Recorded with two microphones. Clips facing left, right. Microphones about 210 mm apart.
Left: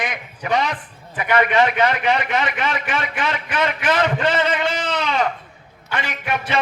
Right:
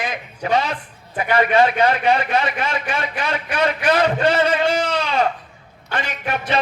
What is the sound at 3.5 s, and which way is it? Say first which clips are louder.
Speech: right 2 dB; 30° right (ahead or behind).